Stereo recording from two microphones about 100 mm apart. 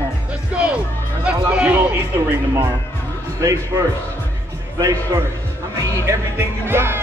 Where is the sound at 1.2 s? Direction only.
10° right (ahead or behind).